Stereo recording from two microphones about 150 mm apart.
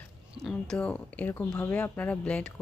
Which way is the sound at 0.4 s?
5° left (ahead or behind).